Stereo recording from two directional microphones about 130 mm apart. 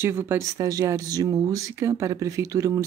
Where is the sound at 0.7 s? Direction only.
30° right (ahead or behind).